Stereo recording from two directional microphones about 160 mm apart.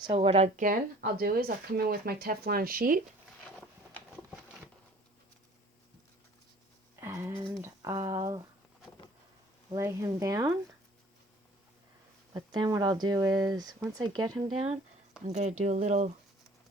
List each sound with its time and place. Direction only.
0.1 s speech: 35° right (ahead or behind); by 0.8 s 55° right (ahead or behind)
1.2 s speech: 70° right (ahead or behind)
3.4 s a sound: 5° left (ahead or behind)
7.0 s a sound: 15° right (ahead or behind)
7.6 s speech: 20° right (ahead or behind)
9.7 s speech: 20° right (ahead or behind)
12.3 s speech: 25° right (ahead or behind)
14.5 s speech: 40° right (ahead or behind)